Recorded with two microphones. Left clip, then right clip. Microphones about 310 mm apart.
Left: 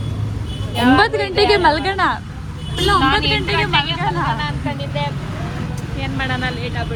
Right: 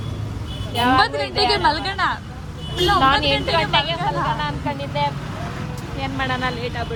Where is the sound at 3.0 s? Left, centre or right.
Centre.